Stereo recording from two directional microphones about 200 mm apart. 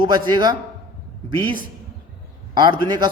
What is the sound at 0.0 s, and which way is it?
Speech, 20° right (ahead or behind).